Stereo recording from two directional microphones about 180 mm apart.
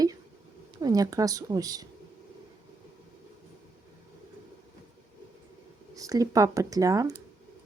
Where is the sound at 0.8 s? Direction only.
20° right (ahead or behind).